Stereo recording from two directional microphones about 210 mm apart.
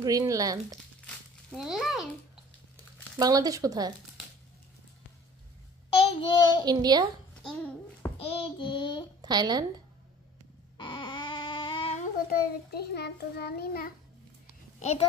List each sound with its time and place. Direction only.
0.0 s speech: 15° right (ahead or behind)
1.5 s a child's voice: centre (ahead or behind)
3.2 s speech: 15° right (ahead or behind)
5.9 s child singing: 25° left (ahead or behind)
6.6 s a woman's voice: 20° right (ahead or behind)
8.2 s child singing: 25° left (ahead or behind)
9.2 s a woman's voice: 20° right (ahead or behind)
10.8 s baby cry: 20° left (ahead or behind)
12.3 s child singing: 50° left (ahead or behind)
14.8 s a child's voice: 30° left (ahead or behind)